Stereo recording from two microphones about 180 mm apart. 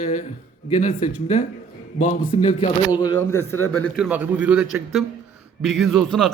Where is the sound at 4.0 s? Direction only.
10° right (ahead or behind).